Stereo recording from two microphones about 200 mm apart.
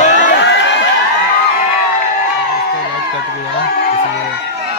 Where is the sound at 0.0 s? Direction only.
35° left (ahead or behind).